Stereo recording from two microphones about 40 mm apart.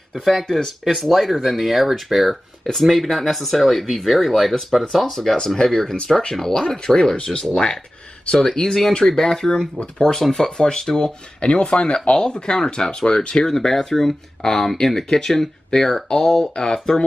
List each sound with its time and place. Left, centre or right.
0.1 s speech: centre